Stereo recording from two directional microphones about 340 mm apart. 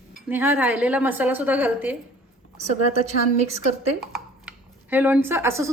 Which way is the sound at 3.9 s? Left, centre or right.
Centre.